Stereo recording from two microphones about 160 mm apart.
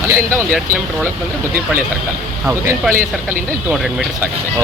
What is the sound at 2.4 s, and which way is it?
Speech, 15° right (ahead or behind).